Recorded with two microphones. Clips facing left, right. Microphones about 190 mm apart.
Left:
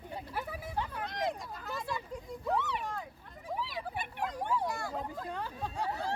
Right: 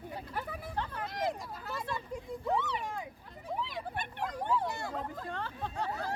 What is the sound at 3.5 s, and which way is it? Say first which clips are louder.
Speech: even; centre (ahead or behind).